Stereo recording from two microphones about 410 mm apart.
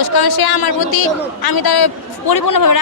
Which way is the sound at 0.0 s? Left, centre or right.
Left.